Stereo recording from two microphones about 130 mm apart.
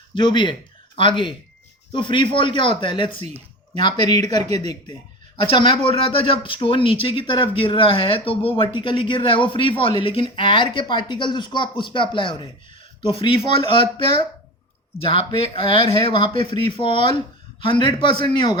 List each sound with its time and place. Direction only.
0.1 s speech: 40° left (ahead or behind)
3.2 s speech: 55° right (ahead or behind)
4.0 s speech: 30° left (ahead or behind)
14.9 s speech: 45° left (ahead or behind)